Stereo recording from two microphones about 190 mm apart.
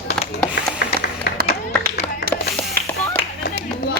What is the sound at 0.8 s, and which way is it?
Music, 60° left (ahead or behind).